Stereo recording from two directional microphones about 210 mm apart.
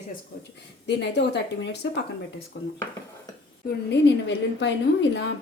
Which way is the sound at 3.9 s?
55° left (ahead or behind).